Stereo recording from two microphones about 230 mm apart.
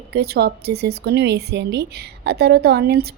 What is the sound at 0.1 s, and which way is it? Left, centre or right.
A woman's voice, right.